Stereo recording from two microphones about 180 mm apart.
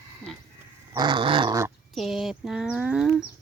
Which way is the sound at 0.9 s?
25° right (ahead or behind).